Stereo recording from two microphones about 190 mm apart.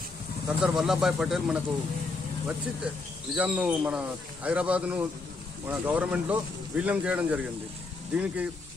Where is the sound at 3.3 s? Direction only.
5° right (ahead or behind).